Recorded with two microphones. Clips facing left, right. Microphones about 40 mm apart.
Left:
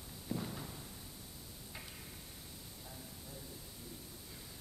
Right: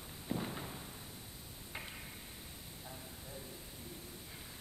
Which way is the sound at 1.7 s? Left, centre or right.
Right.